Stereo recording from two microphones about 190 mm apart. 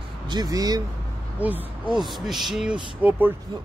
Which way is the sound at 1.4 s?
10° right (ahead or behind).